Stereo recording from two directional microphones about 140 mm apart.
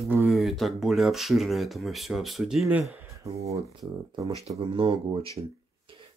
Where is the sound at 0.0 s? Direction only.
15° right (ahead or behind).